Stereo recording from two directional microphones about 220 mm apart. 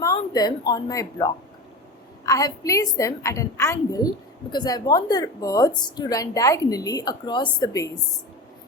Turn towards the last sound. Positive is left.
turn(degrees=15)  # may be behind; listen again after turning